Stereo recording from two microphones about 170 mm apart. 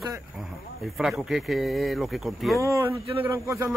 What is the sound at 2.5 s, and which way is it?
A man's voice, 20° right (ahead or behind).